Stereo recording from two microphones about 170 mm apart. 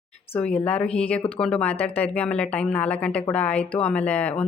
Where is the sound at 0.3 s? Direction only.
5° left (ahead or behind).